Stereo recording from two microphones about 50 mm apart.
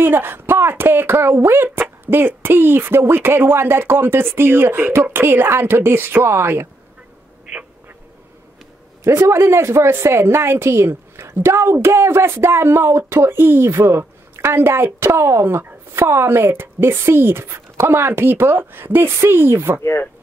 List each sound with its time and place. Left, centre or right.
0.0 s a woman's voice: right
9.0 s a woman's voice: right
15.0 s a woman's voice: right
15.4 s a woman's voice: right